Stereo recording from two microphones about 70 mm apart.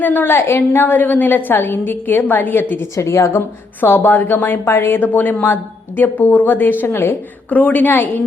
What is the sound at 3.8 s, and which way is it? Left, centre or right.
A woman's voice, left.